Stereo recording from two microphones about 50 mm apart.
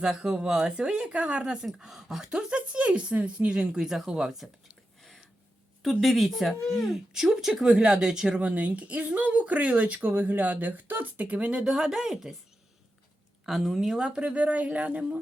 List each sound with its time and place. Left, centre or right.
0.0 s speech: centre
1.6 s speech: centre
2.6 s speech: right
5.8 s speech: centre
7.1 s speech: centre
8.4 s speech: right
11.6 s speech: centre
13.4 s speech: centre
14.0 s speech: right